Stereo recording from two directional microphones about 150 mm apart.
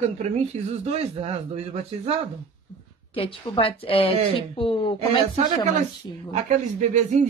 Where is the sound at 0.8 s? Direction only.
45° right (ahead or behind).